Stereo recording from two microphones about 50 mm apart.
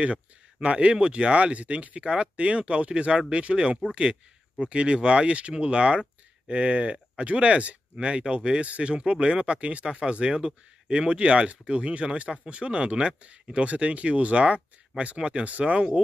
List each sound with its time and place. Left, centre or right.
0.0 s speech: right